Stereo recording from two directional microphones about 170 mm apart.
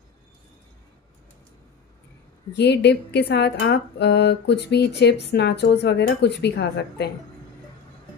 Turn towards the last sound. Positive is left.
turn(degrees=80)